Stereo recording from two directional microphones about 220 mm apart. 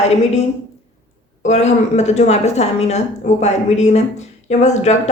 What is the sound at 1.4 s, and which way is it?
A woman's voice, 30° left (ahead or behind).